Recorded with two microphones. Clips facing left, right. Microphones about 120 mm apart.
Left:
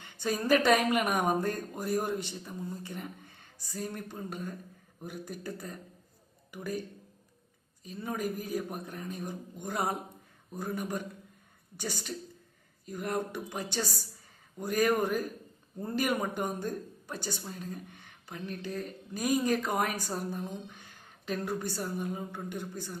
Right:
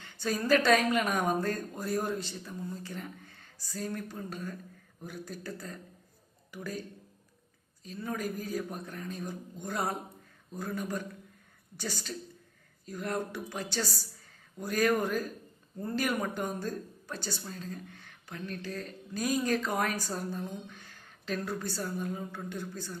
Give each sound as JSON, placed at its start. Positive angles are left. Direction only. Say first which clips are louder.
{"t": 0.0, "sound": "speech", "louder": "even", "side_deg": 15}
{"t": 7.9, "sound": "speech", "louder": "left 1 dB", "side_deg": 20}